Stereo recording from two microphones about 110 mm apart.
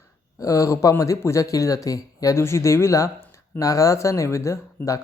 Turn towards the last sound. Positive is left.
turn(degrees=30)  # may be behind; listen again after turning